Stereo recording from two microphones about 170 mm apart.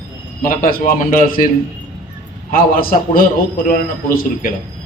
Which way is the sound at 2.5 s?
55° left (ahead or behind).